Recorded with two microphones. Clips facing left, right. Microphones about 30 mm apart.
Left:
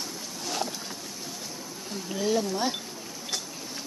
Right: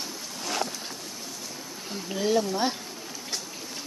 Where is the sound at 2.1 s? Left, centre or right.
Centre.